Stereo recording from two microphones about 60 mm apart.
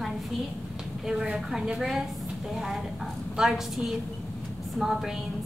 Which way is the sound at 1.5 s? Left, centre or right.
Centre.